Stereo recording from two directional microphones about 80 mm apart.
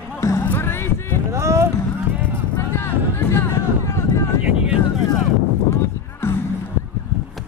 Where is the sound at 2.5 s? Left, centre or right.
Left.